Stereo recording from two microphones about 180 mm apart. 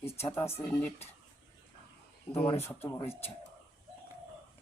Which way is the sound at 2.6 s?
15° left (ahead or behind).